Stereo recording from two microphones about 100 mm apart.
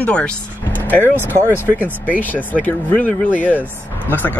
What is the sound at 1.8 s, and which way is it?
Speech, 15° right (ahead or behind).